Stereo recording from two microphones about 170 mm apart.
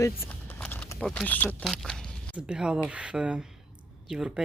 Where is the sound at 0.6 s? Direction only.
5° left (ahead or behind).